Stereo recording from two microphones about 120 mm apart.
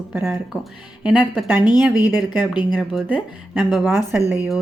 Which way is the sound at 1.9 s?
30° left (ahead or behind).